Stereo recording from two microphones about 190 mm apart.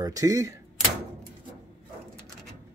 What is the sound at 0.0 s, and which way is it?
Speech, 20° right (ahead or behind).